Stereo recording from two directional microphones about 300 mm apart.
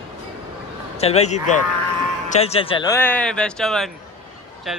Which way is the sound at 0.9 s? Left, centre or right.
Left.